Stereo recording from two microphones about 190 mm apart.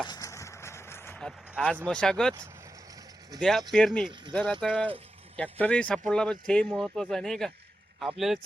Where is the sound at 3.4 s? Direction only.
Centre (ahead or behind).